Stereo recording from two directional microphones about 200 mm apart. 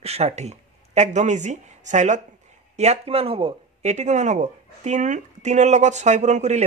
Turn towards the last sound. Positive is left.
turn(degrees=-35)  # may be behind; listen again after turning